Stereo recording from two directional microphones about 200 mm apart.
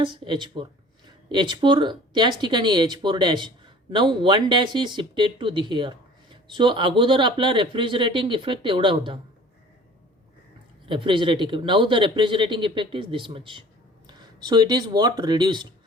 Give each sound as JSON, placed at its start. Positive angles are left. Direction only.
{"t": 0.0, "sound": "speech", "side_deg": -25}
{"t": 10.8, "sound": "speech", "side_deg": -25}